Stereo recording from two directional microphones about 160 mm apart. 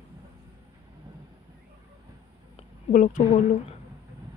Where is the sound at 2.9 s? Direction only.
55° left (ahead or behind).